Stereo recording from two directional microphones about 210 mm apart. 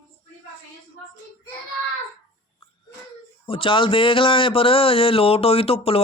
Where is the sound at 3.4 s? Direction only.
25° left (ahead or behind).